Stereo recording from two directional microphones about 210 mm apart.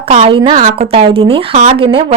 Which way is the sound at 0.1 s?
30° right (ahead or behind).